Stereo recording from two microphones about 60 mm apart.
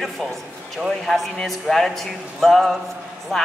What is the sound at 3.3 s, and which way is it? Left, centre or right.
Speech, centre.